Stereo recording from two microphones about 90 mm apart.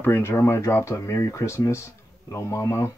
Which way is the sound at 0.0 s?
25° left (ahead or behind).